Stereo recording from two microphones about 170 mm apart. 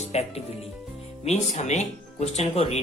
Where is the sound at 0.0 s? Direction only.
40° left (ahead or behind).